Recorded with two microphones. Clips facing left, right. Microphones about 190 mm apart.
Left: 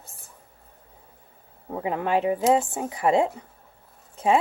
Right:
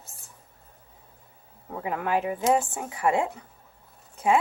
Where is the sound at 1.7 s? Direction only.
25° left (ahead or behind).